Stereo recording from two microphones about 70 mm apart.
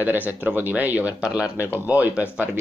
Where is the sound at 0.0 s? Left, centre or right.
Right.